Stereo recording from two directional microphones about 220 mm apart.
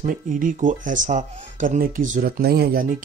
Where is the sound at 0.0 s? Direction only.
35° right (ahead or behind).